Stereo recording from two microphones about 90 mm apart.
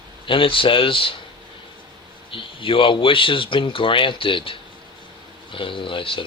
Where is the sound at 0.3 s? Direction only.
75° left (ahead or behind).